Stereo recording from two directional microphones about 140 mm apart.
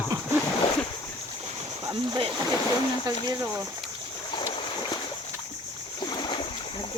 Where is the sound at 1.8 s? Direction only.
30° right (ahead or behind).